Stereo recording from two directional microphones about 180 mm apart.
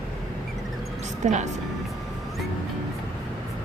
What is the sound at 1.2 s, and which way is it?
Speech, 40° right (ahead or behind).